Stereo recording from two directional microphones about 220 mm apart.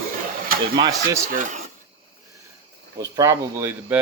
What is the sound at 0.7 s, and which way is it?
Speech, 20° right (ahead or behind).